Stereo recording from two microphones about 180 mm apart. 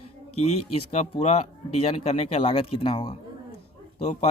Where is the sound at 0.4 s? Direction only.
35° left (ahead or behind).